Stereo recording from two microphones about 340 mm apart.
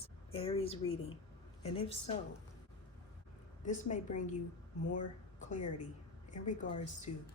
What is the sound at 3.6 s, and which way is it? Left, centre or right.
Speech, left.